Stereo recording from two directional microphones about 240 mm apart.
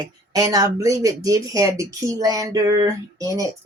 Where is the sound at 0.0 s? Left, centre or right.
Centre.